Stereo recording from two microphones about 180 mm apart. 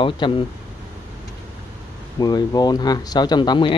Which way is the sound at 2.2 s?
20° left (ahead or behind).